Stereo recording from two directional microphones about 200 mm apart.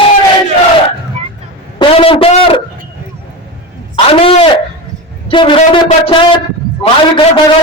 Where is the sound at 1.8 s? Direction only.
25° left (ahead or behind).